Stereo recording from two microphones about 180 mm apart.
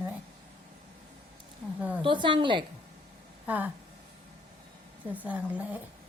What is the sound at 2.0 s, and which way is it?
Speech, 25° right (ahead or behind).